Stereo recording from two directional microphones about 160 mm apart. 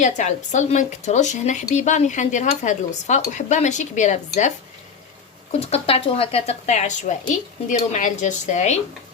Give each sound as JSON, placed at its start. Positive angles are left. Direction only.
{"t": 0.0, "sound": "speech", "side_deg": 50}